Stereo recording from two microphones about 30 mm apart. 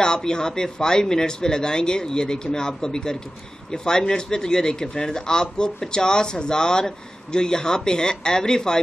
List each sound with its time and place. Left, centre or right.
0.0 s speech: left